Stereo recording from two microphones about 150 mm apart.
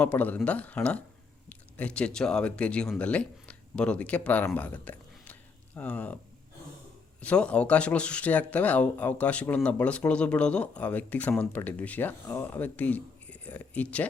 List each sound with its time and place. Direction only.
0.0 s speech: 10° left (ahead or behind)
7.2 s speech: 10° left (ahead or behind)